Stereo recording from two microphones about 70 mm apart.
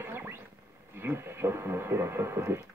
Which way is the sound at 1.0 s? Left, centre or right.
Right.